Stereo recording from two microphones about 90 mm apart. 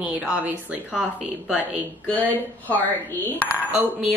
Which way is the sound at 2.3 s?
20° left (ahead or behind).